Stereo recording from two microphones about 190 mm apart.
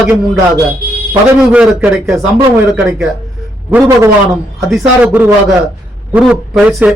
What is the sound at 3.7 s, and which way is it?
A man's voice, 10° right (ahead or behind).